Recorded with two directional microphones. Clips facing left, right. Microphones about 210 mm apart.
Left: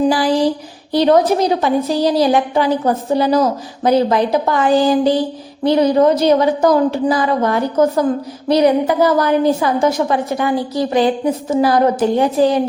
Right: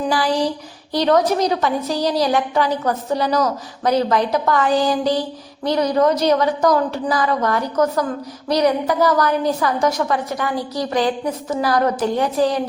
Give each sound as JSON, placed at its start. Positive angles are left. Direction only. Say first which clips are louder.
{"t": 0.9, "sound": "a woman's voice", "louder": "left 4 dB", "side_deg": 30}